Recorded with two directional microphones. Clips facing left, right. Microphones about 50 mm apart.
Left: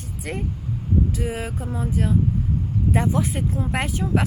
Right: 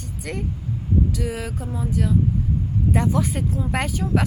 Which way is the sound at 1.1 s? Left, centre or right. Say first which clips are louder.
Even; left.